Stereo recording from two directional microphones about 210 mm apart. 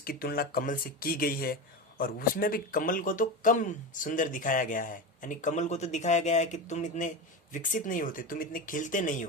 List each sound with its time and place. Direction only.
0.0 s speech: 45° left (ahead or behind)